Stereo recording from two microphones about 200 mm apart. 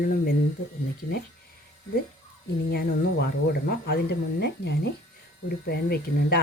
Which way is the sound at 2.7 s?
50° left (ahead or behind).